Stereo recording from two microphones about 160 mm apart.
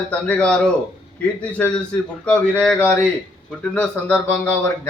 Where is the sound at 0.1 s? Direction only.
5° left (ahead or behind).